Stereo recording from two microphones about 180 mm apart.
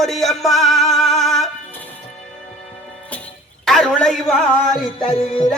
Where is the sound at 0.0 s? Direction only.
Centre (ahead or behind).